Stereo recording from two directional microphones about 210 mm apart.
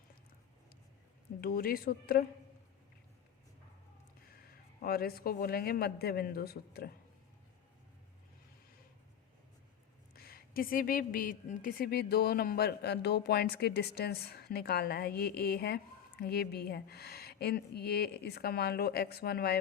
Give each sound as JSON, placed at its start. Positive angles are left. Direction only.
{"t": 1.4, "sound": "a woman's voice", "side_deg": 45}
{"t": 4.3, "sound": "a man's voice", "side_deg": 45}
{"t": 10.2, "sound": "a woman's voice", "side_deg": 45}